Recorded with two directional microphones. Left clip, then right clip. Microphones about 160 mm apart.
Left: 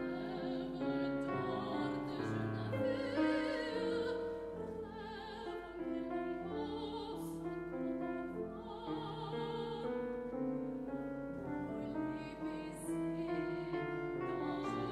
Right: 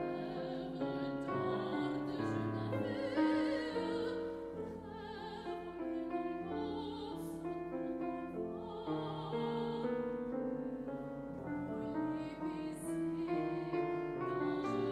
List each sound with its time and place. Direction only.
1.3 s music: 30° right (ahead or behind)
2.9 s music: 5° left (ahead or behind)
13.3 s music: 30° right (ahead or behind)